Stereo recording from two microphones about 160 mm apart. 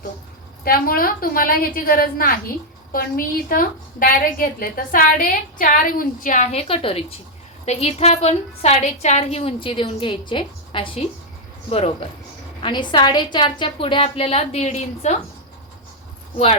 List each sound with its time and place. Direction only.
0.6 s a woman's voice: 65° left (ahead or behind); by 12.0 s 40° left (ahead or behind)
12.6 s a woman's voice: 30° left (ahead or behind); by 15.1 s 45° left (ahead or behind)